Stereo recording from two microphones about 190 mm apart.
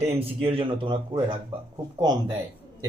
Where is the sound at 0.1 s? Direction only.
30° right (ahead or behind).